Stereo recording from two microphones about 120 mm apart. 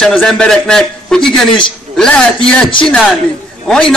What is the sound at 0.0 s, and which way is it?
A man's voice, 5° left (ahead or behind).